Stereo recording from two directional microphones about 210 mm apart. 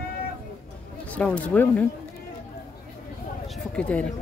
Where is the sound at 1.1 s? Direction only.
5° left (ahead or behind).